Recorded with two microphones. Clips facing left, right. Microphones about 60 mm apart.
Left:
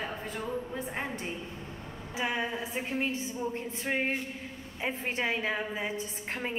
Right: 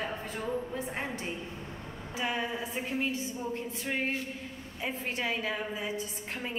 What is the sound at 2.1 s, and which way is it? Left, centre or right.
A woman's voice, left.